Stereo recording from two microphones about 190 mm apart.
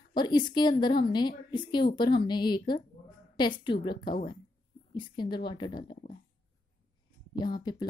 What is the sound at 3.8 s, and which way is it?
Speech, 25° left (ahead or behind).